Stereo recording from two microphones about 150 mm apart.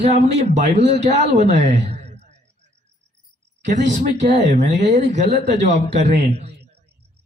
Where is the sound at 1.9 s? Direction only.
45° right (ahead or behind).